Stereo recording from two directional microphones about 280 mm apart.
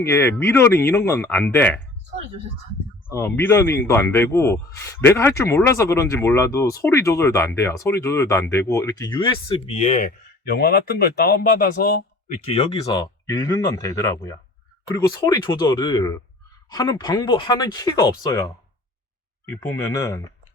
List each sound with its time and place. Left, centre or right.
0.0 s speech: centre
3.1 s speech: centre
10.4 s speech: left
12.5 s speech: centre